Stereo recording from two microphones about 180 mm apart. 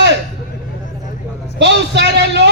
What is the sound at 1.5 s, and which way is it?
Speech, 70° right (ahead or behind).